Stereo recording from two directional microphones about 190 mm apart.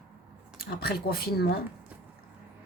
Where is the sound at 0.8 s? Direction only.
55° left (ahead or behind).